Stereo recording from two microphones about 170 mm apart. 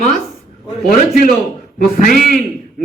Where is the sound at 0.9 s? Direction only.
55° left (ahead or behind).